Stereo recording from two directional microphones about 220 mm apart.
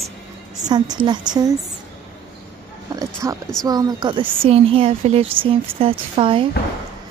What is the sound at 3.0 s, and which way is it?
A woman's voice, 15° right (ahead or behind).